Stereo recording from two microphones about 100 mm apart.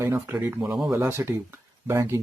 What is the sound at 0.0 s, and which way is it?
Speech, 30° right (ahead or behind).